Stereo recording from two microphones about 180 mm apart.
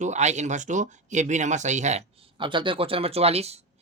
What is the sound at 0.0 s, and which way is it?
Speech, 40° right (ahead or behind).